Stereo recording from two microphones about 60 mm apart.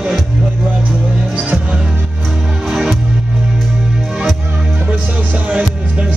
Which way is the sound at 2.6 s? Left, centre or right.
Centre.